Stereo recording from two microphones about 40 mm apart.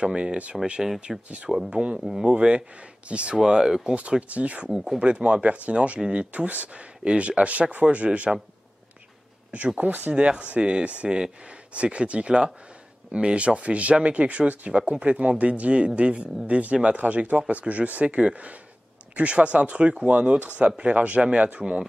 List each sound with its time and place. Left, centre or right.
0.0 s speech: right
1.1 s speech: centre
1.7 s speech: right
3.3 s speech: centre
4.3 s speech: right
4.6 s speech: centre
5.0 s speech: right
9.8 s speech: right
10.1 s speech: right